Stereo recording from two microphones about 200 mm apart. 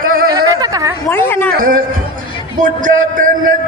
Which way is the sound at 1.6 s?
45° right (ahead or behind).